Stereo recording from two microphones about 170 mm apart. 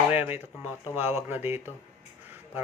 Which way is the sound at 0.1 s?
10° right (ahead or behind).